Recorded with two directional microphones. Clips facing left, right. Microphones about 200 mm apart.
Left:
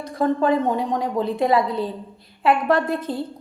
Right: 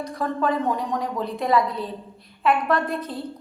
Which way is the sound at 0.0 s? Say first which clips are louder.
Left 4 dB; 30° left (ahead or behind).